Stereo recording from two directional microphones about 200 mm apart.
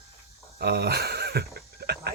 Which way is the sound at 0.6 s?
55° right (ahead or behind).